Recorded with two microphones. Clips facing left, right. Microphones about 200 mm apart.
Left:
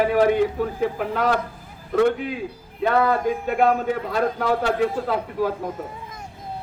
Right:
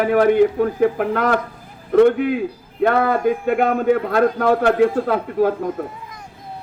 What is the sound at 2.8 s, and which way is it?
A man's voice, 55° right (ahead or behind).